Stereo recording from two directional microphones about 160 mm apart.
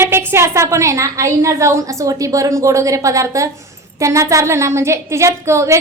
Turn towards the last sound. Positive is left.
turn(degrees=-15)  # may be behind; listen again after turning